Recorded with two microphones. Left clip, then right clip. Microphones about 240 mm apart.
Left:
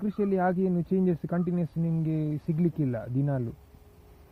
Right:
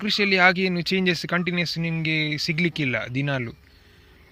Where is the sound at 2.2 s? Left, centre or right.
Right.